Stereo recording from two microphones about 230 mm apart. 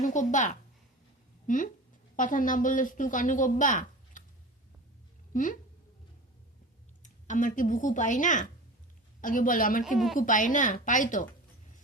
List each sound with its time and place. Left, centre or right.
0.0 s a woman's voice: left
5.3 s speech: left
7.0 s a woman's voice: left